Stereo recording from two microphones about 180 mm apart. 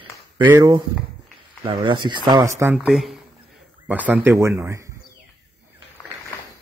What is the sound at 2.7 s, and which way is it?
Speech, centre (ahead or behind).